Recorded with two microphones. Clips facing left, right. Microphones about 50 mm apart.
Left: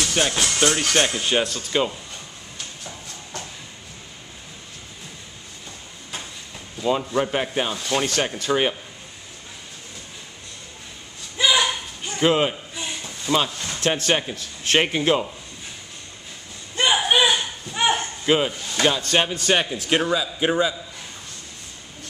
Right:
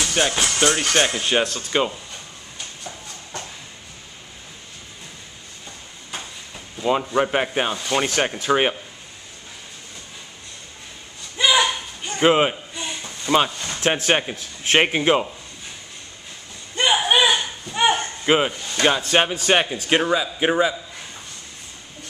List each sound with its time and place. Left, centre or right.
0.0 s speech: centre
1.7 s speech: centre
6.8 s speech: right
11.3 s a sound: centre
12.2 s speech: right
12.7 s a sound: centre
13.6 s speech: centre
16.7 s a sound: centre
18.2 s speech: centre